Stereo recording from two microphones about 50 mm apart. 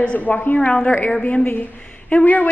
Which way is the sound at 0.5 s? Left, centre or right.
Centre.